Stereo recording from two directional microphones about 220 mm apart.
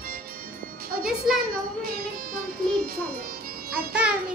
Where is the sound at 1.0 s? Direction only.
Centre (ahead or behind).